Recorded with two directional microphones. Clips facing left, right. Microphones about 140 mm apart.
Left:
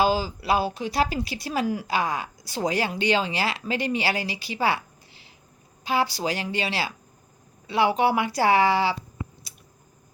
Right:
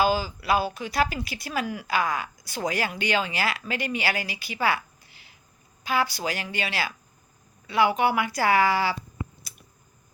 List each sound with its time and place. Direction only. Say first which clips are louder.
0.0 s speech: left 1 dB; 30° left (ahead or behind)